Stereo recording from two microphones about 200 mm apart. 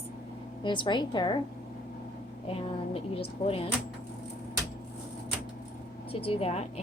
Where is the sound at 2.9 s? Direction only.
25° left (ahead or behind).